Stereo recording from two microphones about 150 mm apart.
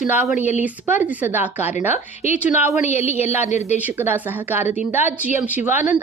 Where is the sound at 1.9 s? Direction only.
50° left (ahead or behind).